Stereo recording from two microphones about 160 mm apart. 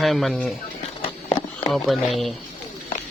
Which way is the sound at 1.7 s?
Centre (ahead or behind).